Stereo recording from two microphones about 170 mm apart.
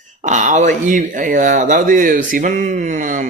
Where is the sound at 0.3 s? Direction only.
45° right (ahead or behind).